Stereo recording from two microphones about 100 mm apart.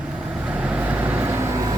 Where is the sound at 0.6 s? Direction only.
15° right (ahead or behind); by 1.7 s 35° right (ahead or behind).